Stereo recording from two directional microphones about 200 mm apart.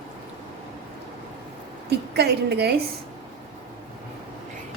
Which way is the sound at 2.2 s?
55° right (ahead or behind).